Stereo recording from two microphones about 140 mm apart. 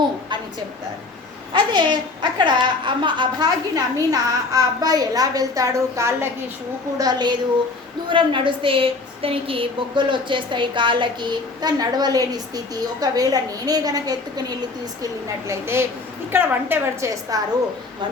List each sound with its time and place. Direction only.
1.5 s a woman's voice: 30° right (ahead or behind)
15.4 s a woman's voice: 20° right (ahead or behind)